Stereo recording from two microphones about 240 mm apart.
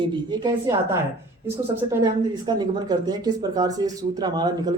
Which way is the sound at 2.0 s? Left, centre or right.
Centre.